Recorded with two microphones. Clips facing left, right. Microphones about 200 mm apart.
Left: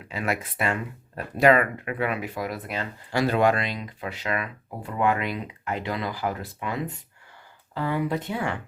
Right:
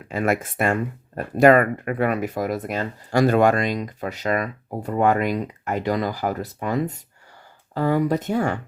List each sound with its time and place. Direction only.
0.1 s speech: 50° right (ahead or behind)